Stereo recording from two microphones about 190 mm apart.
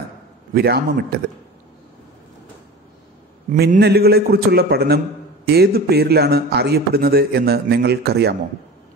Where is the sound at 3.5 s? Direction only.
40° right (ahead or behind).